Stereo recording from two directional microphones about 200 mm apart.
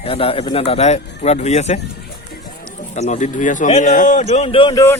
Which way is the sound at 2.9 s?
35° left (ahead or behind).